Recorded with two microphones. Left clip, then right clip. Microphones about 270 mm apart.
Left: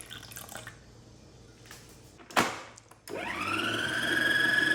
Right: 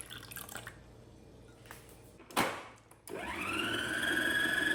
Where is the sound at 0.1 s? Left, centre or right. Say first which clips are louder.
Left 2 dB; centre.